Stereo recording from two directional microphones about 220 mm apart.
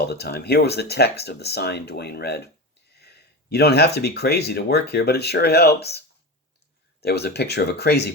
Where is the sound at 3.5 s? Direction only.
50° left (ahead or behind).